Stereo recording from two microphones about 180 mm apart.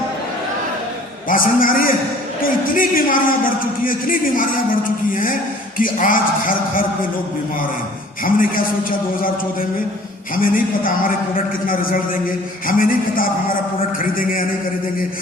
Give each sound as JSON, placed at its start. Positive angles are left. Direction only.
{"t": 1.3, "sound": "a man's voice", "side_deg": 50}
{"t": 8.2, "sound": "a man's voice", "side_deg": 50}
{"t": 10.3, "sound": "a man's voice", "side_deg": 50}